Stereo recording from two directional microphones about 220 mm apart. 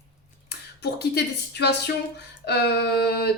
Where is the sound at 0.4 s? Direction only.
50° left (ahead or behind).